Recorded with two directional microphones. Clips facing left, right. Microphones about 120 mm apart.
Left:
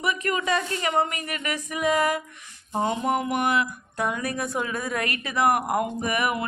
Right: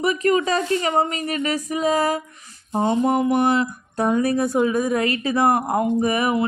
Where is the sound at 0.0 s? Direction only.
35° right (ahead or behind).